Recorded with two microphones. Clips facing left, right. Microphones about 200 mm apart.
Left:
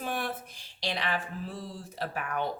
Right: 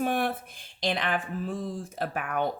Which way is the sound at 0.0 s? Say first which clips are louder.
Right 7 dB; 55° right (ahead or behind).